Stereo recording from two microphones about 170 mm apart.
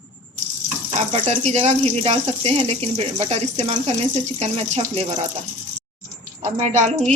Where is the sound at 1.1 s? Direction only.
40° right (ahead or behind).